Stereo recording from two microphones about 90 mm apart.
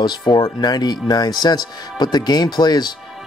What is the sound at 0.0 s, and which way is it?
Speech, 55° left (ahead or behind).